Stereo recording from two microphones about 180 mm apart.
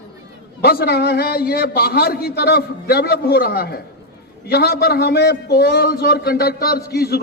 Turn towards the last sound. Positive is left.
turn(degrees=60)  # may be behind; listen again after turning